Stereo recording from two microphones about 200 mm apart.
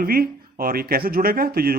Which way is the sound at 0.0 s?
45° right (ahead or behind).